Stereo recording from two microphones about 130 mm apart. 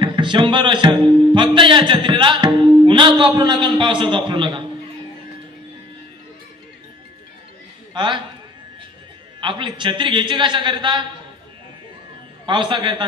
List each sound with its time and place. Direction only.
0.0 s music: 35° right (ahead or behind)
7.9 s a man's voice: 35° right (ahead or behind)
9.4 s music: 40° right (ahead or behind)
12.4 s music: 40° right (ahead or behind)